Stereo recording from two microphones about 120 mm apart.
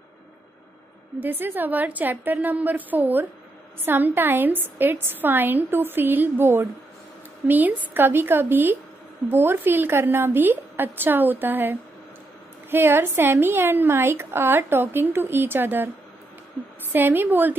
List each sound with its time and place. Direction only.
1.2 s a woman's voice: 15° right (ahead or behind)
16.9 s a woman's voice: 15° right (ahead or behind)